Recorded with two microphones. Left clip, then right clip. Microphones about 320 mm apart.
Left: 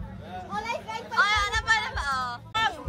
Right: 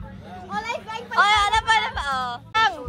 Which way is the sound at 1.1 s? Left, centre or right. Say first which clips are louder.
Right 6 dB; centre.